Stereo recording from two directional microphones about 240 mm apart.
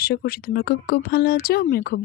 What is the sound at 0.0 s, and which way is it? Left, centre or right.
Speech, left.